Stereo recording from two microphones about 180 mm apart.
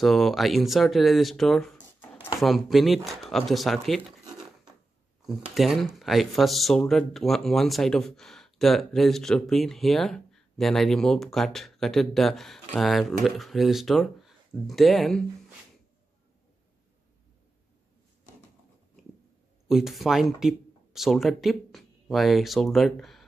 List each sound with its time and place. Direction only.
0.0 s speech: centre (ahead or behind)
19.7 s speech: centre (ahead or behind)